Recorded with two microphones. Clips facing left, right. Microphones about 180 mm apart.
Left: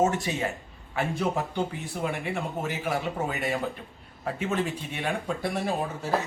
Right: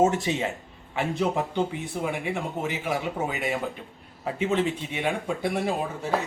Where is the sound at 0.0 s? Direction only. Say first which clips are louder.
Right 3 dB; 20° right (ahead or behind).